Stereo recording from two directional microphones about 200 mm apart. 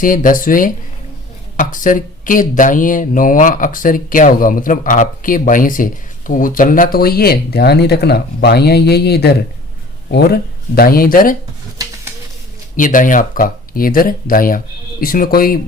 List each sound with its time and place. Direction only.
0.0 s speech: 45° left (ahead or behind)
12.7 s speech: 40° left (ahead or behind)